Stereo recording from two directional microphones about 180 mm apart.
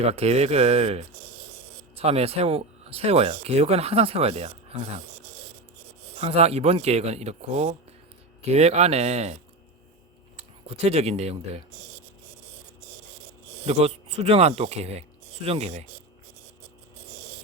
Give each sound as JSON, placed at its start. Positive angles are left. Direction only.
{"t": 0.0, "sound": "speech", "side_deg": -35}
{"t": 6.1, "sound": "speech", "side_deg": -35}
{"t": 10.7, "sound": "speech", "side_deg": -35}
{"t": 13.7, "sound": "speech", "side_deg": -35}